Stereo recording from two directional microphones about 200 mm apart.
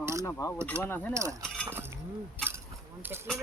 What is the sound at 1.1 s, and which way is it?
Speech, 15° right (ahead or behind).